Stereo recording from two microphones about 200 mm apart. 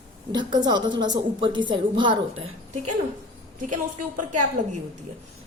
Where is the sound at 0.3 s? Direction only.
20° right (ahead or behind).